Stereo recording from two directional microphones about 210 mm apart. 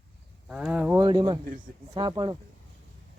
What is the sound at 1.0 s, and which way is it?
Speech, 20° right (ahead or behind).